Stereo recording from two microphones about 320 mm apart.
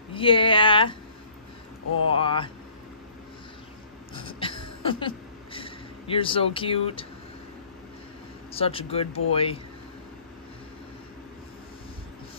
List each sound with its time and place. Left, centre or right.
0.1 s speech: centre
2.1 s speech: centre
4.1 s a sound: centre
8.5 s speech: centre